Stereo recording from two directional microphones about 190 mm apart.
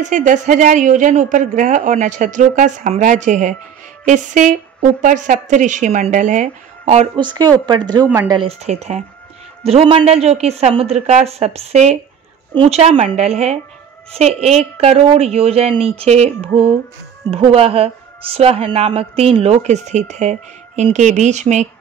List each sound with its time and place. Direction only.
0.0 s a woman's voice: 40° right (ahead or behind)
7.2 s a woman's voice: 20° right (ahead or behind)
8.4 s a woman's voice: 35° right (ahead or behind)